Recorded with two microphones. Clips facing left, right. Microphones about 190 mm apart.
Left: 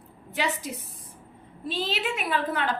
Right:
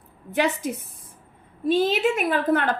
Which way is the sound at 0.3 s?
50° right (ahead or behind).